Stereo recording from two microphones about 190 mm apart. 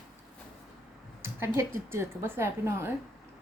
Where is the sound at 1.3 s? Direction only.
15° right (ahead or behind).